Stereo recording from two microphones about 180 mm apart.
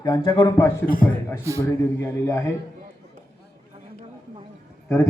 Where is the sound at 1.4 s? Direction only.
15° right (ahead or behind).